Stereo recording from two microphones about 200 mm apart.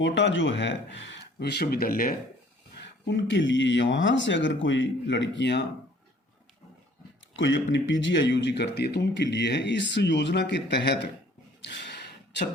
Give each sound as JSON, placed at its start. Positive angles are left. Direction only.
{"t": 0.0, "sound": "speech", "side_deg": 65}
{"t": 2.8, "sound": "speech", "side_deg": 60}
{"t": 7.3, "sound": "speech", "side_deg": 65}
{"t": 11.6, "sound": "a sound", "side_deg": 60}